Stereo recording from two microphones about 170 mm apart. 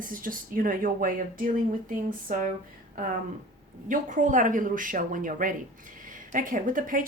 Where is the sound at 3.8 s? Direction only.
50° right (ahead or behind).